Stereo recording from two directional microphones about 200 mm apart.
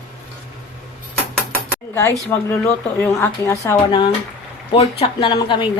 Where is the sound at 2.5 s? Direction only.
10° left (ahead or behind).